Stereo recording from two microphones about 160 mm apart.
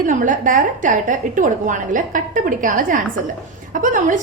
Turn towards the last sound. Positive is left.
turn(degrees=-55)  # may be behind; listen again after turning